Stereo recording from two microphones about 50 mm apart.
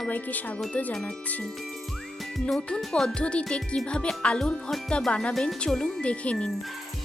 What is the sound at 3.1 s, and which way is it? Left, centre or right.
Music, left.